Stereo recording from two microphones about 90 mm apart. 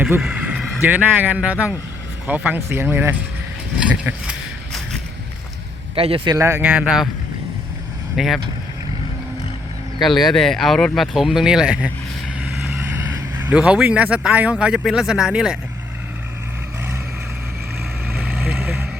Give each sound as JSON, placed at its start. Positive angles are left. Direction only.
{"t": 0.2, "sound": "speech", "side_deg": -15}
{"t": 2.6, "sound": "speech", "side_deg": -30}
{"t": 3.8, "sound": "speech", "side_deg": -10}
{"t": 6.0, "sound": "a man's voice", "side_deg": -90}
{"t": 6.3, "sound": "speech", "side_deg": -30}
{"t": 6.6, "sound": "speech", "side_deg": -15}
{"t": 8.1, "sound": "speech", "side_deg": 0}
{"t": 10.0, "sound": "speech", "side_deg": 0}
{"t": 13.5, "sound": "speech", "side_deg": -10}
{"t": 18.1, "sound": "vehicle", "side_deg": -10}